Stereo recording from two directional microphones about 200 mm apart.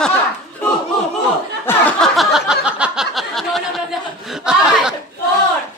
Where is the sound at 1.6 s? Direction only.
5° left (ahead or behind).